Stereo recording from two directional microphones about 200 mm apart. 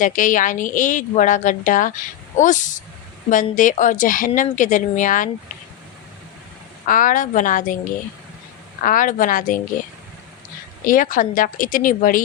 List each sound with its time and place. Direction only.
0.0 s speech: 40° left (ahead or behind)
6.8 s speech: 40° left (ahead or behind)
8.8 s speech: 40° left (ahead or behind)
10.8 s a woman's voice: 40° left (ahead or behind)